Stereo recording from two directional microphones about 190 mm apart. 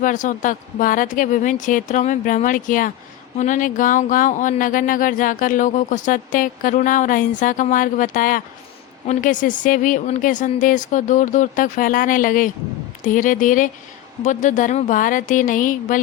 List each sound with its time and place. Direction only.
0.0 s speech: 40° left (ahead or behind)